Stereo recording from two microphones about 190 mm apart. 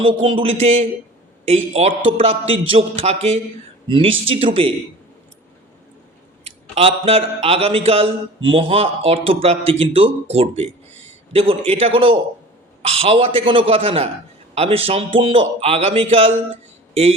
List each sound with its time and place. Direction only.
0.0 s a man's voice: 30° right (ahead or behind)
6.4 s a man's voice: 30° right (ahead or behind)